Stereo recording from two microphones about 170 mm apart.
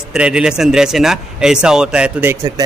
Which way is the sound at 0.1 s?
5° right (ahead or behind).